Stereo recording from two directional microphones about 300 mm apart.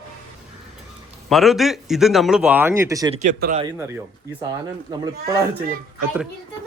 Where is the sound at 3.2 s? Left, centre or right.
Right.